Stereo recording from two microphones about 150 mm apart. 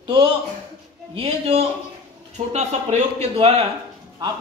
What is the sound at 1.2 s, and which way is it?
Speech, 45° right (ahead or behind).